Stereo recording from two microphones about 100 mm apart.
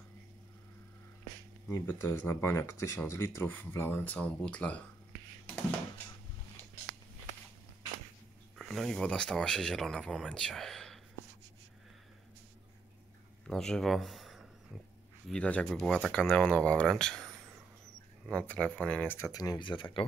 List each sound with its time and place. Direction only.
1.9 s speech: 25° left (ahead or behind)
8.5 s speech: 5° left (ahead or behind)
13.5 s a sound: 5° left (ahead or behind)
15.2 s speech: 10° left (ahead or behind)
19.3 s speech: 40° left (ahead or behind); by 20.1 s 60° left (ahead or behind)